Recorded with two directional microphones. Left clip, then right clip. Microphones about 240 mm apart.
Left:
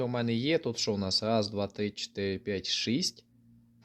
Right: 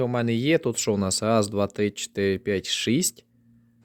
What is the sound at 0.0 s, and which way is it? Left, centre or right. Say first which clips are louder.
Speech: right 6 dB; right.